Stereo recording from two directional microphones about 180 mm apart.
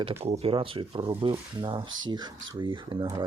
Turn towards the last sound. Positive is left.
turn(degrees=-30)  # may be behind; listen again after turning